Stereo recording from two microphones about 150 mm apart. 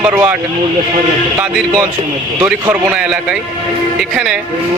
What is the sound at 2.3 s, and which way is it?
A man's voice, 15° right (ahead or behind).